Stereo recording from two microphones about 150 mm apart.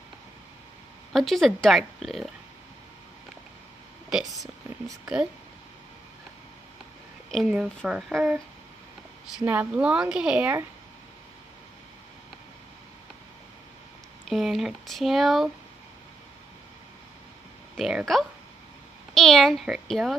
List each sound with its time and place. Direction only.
1.1 s speech: centre (ahead or behind)
4.1 s speech: 5° right (ahead or behind)
4.6 s speech: 20° right (ahead or behind)
7.2 s a woman's voice: centre (ahead or behind)
9.5 s a woman's voice: 10° right (ahead or behind)
14.3 s speech: centre (ahead or behind)
17.7 s speech: centre (ahead or behind)